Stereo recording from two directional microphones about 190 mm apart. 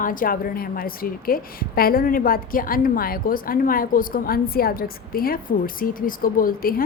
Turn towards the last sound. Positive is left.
turn(degrees=50)  # may be behind; listen again after turning